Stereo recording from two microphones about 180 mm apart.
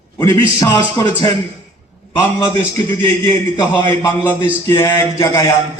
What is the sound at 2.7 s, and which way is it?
A man's voice, 25° left (ahead or behind).